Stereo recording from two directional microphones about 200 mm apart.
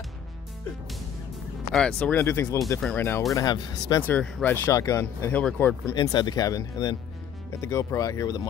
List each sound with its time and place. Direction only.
1.7 s speech: 5° left (ahead or behind)
5.9 s speech: 20° left (ahead or behind)